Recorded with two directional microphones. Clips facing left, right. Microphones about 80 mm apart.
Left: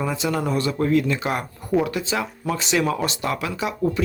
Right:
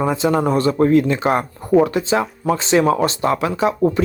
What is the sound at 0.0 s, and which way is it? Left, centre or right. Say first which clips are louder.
Speech: right 7 dB; right.